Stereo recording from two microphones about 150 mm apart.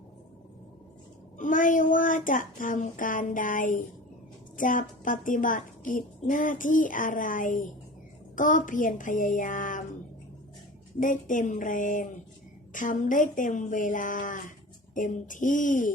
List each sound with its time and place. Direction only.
1.4 s a woman's voice: 60° left (ahead or behind)
11.0 s a woman's voice: 60° left (ahead or behind)